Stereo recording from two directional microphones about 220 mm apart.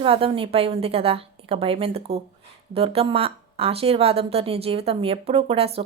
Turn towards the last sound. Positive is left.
turn(degrees=-25)  # may be behind; listen again after turning